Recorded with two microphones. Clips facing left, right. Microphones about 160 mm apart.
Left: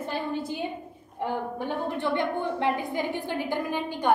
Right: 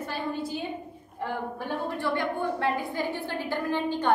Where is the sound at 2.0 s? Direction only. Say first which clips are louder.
Left 1 dB; 20° left (ahead or behind).